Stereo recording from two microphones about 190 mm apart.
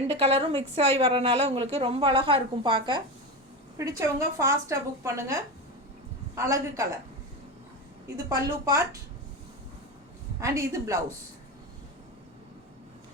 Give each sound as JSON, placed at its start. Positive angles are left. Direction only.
{"t": 0.2, "sound": "a woman's voice", "side_deg": -30}
{"t": 8.1, "sound": "speech", "side_deg": -15}
{"t": 10.4, "sound": "speech", "side_deg": -15}